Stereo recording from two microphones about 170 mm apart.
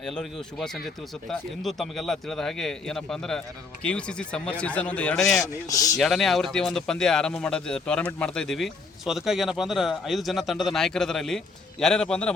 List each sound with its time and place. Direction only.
0.0 s speech: 5° left (ahead or behind)
5.4 s speech: 20° left (ahead or behind)
6.0 s speech: centre (ahead or behind)